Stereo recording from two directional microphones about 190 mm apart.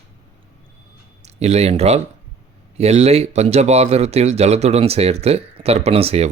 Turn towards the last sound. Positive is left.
turn(degrees=-30)  # may be behind; listen again after turning